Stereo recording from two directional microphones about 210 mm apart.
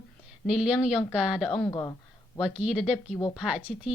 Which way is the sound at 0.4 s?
5° right (ahead or behind).